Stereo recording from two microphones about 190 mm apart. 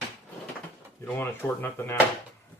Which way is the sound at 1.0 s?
10° left (ahead or behind).